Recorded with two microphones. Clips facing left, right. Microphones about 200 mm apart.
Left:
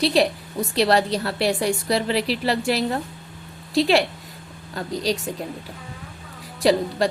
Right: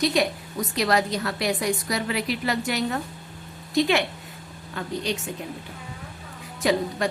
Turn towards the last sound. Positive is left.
turn(degrees=30)  # may be behind; listen again after turning